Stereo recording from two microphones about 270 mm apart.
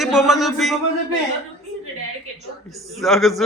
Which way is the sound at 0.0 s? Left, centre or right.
Centre.